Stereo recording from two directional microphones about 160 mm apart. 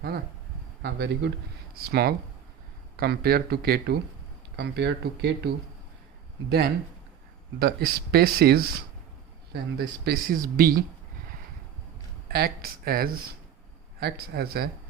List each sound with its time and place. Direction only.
0.8 s speech: 90° right
1.7 s speech: 75° right (ahead or behind); by 5.5 s 90° right
7.6 s speech: 75° right (ahead or behind)
9.5 s speech: 90° right; by 10.8 s 65° right (ahead or behind)
12.3 s speech: 70° right (ahead or behind)
14.0 s speech: 80° right